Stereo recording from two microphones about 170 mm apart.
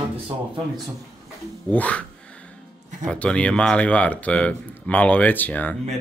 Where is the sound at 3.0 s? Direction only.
5° left (ahead or behind).